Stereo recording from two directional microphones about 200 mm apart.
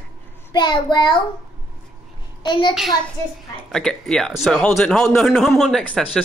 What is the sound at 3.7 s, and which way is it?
Speech, centre (ahead or behind).